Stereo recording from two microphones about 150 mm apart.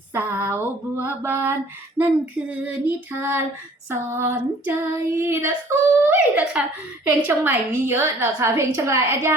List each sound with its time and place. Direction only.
0.1 s female singing: 15° right (ahead or behind)